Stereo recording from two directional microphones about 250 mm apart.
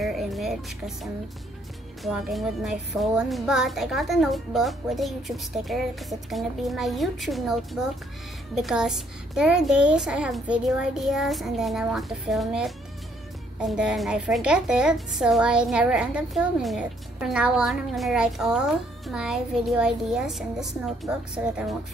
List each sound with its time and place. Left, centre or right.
0.0 s music: centre
2.0 s a child's voice: centre